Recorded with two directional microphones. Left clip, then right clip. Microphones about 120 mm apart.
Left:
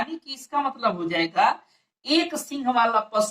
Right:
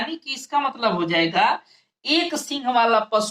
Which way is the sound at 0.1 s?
35° right (ahead or behind).